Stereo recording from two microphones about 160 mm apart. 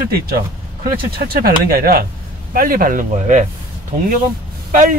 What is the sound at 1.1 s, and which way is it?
Speech, 70° right (ahead or behind).